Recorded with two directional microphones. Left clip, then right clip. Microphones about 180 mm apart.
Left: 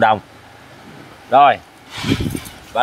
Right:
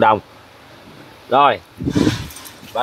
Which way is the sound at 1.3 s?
45° right (ahead or behind).